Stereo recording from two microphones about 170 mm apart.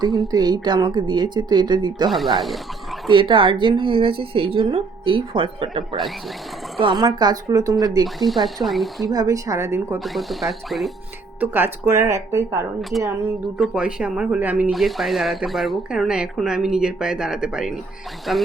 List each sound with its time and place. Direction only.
0.3 s speech: 25° right (ahead or behind)
2.0 s speech: centre (ahead or behind)
3.1 s speech: 30° right (ahead or behind)
8.0 s speech: centre (ahead or behind)
9.1 s speech: 20° right (ahead or behind)
10.0 s speech: centre (ahead or behind)
11.3 s speech: 10° right (ahead or behind)
13.6 s speech: 5° right (ahead or behind)